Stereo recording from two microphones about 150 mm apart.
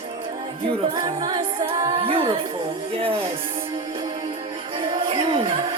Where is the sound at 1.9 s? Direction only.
40° right (ahead or behind).